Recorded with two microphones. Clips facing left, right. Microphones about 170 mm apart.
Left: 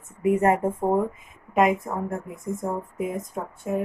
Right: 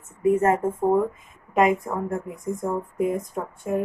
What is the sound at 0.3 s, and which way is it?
Speech, 15° left (ahead or behind).